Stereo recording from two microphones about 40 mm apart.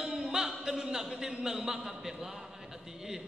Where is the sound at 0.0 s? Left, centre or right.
Centre.